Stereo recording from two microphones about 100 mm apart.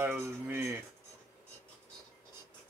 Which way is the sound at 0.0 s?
20° right (ahead or behind).